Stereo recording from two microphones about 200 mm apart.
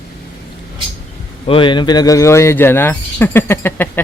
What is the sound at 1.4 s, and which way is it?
Speech, 25° left (ahead or behind).